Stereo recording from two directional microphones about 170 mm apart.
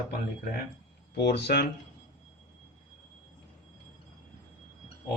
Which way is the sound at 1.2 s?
75° left (ahead or behind).